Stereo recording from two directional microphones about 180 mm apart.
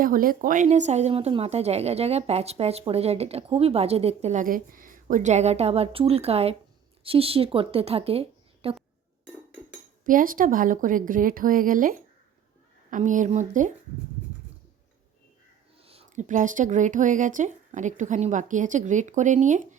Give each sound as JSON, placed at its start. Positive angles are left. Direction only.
{"t": 0.0, "sound": "a woman's voice", "side_deg": -50}
{"t": 10.0, "sound": "speech", "side_deg": -50}
{"t": 15.8, "sound": "speech", "side_deg": -35}